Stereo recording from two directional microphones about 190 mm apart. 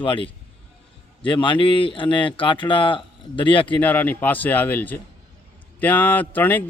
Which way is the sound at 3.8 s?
10° left (ahead or behind).